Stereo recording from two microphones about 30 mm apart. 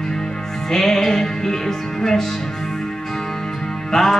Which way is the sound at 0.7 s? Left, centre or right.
Centre.